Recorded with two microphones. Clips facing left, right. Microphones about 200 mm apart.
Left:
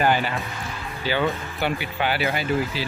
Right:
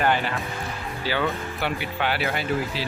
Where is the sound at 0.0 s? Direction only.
5° left (ahead or behind).